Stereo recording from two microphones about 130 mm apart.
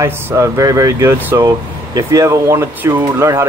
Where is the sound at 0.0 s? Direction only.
20° right (ahead or behind).